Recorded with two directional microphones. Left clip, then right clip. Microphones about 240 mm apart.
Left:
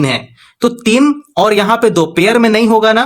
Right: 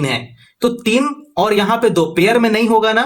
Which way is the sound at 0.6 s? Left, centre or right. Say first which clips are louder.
Left 4 dB; left.